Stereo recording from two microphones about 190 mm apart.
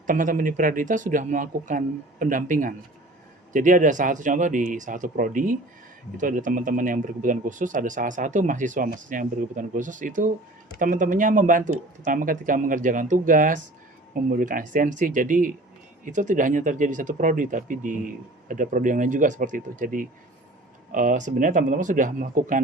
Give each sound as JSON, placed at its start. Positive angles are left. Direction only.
{"t": 0.1, "sound": "speech", "side_deg": -45}